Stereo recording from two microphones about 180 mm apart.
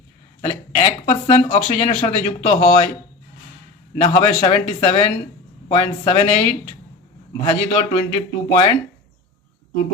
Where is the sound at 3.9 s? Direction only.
30° left (ahead or behind).